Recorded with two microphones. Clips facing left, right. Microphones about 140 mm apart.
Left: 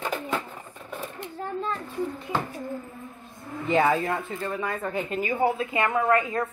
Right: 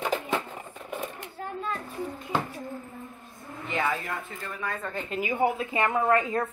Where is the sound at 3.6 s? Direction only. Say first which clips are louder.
Left 7 dB; 35° left (ahead or behind).